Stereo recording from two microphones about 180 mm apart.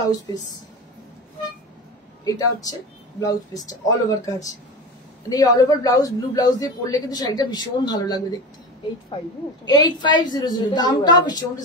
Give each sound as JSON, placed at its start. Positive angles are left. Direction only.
{"t": 0.3, "sound": "speech", "side_deg": 20}
{"t": 2.2, "sound": "speech", "side_deg": 20}
{"t": 9.7, "sound": "speech", "side_deg": 25}